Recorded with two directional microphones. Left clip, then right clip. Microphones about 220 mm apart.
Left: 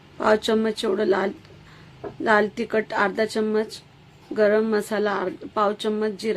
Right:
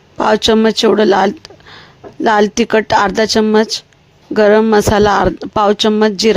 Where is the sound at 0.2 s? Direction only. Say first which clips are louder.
Right 9 dB; 40° right (ahead or behind).